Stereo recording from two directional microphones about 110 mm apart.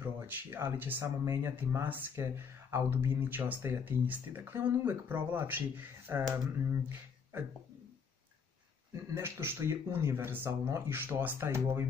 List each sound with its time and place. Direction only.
0.0 s speech: 20° right (ahead or behind)
9.1 s speech: 20° right (ahead or behind)